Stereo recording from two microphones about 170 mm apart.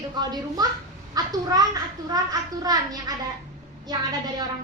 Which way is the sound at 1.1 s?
20° right (ahead or behind).